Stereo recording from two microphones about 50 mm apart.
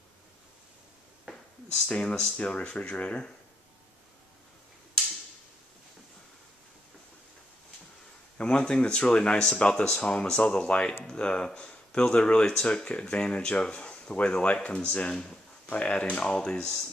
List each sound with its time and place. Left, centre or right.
1.9 s speech: left
8.4 s speech: centre